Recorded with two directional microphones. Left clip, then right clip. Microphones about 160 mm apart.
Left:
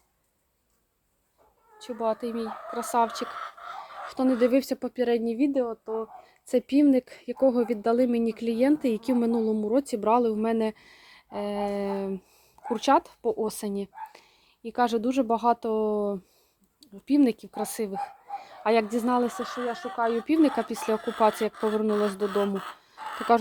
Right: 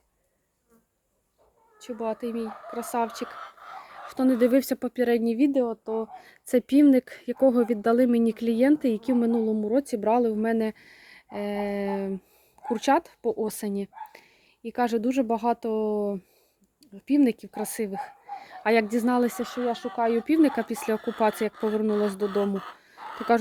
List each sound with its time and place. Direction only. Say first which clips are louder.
1.8 s a woman's voice: left 2 dB; 5° right (ahead or behind); by 20.1 s 30° right (ahead or behind)
20.2 s a woman's voice: right 1 dB; 20° right (ahead or behind)
21.5 s speech: even; 35° left (ahead or behind)
23.0 s a sound: left 2 dB; 45° left (ahead or behind)